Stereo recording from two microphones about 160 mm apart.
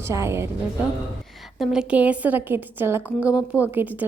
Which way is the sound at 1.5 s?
5° right (ahead or behind).